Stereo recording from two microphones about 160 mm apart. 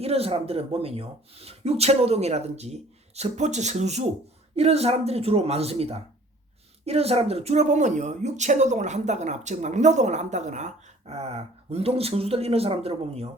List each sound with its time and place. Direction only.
0.0 s speech: 40° right (ahead or behind)